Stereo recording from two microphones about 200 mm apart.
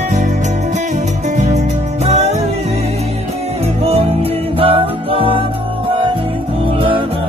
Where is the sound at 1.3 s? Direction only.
35° right (ahead or behind).